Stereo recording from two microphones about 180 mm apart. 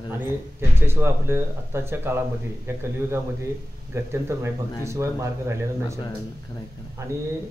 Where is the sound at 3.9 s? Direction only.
15° right (ahead or behind).